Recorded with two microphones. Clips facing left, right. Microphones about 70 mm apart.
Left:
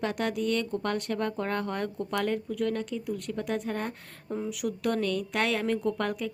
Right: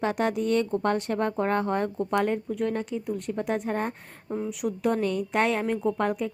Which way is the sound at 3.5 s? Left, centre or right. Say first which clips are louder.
Right 4 dB; right.